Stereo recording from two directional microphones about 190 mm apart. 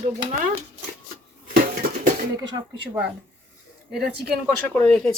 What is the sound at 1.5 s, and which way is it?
Dishes, 50° right (ahead or behind).